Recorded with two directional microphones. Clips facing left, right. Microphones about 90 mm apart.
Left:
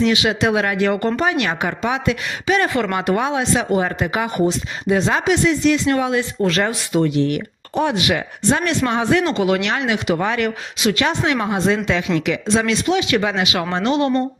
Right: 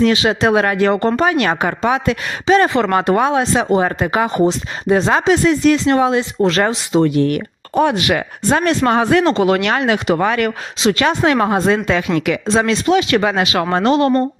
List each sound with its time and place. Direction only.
0.0 s a woman's voice: 40° right (ahead or behind)
4.3 s a woman's voice: 30° right (ahead or behind)
7.0 s speech: 45° right (ahead or behind)
10.2 s speech: 60° right (ahead or behind)
10.9 s speech: 45° right (ahead or behind)
12.5 s speech: 35° right (ahead or behind)